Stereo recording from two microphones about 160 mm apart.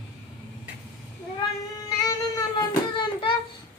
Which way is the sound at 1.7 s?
25° left (ahead or behind).